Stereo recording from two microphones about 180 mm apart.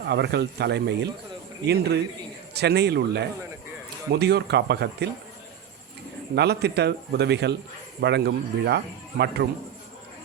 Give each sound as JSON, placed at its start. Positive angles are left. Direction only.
{"t": 0.0, "sound": "a man's voice", "side_deg": -65}
{"t": 6.3, "sound": "speech", "side_deg": -65}